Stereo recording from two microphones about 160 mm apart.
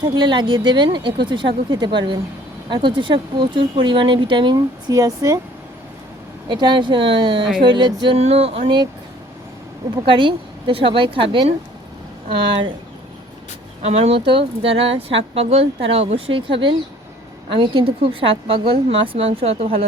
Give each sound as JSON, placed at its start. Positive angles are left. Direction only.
{"t": 0.0, "sound": "speech", "side_deg": -25}
{"t": 6.5, "sound": "speech", "side_deg": -30}
{"t": 10.1, "sound": "speech", "side_deg": -30}
{"t": 13.8, "sound": "speech", "side_deg": -40}